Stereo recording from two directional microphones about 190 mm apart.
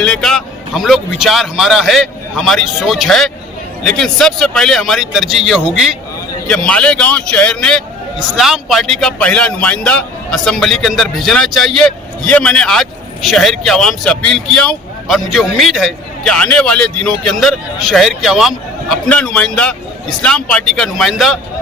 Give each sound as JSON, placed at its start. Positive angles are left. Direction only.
{"t": 0.0, "sound": "a man's voice", "side_deg": 0}